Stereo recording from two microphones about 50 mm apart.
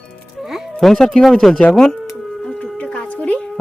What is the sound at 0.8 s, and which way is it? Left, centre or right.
Speech, centre.